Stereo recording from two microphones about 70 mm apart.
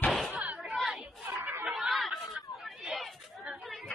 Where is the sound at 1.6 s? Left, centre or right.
Centre.